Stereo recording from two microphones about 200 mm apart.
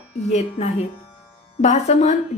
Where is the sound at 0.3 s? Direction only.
35° left (ahead or behind).